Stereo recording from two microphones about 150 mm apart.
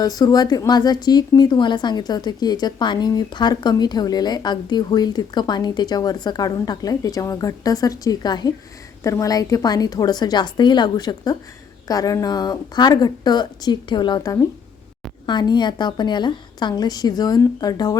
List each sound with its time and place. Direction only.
0.2 s a woman's voice: 25° left (ahead or behind)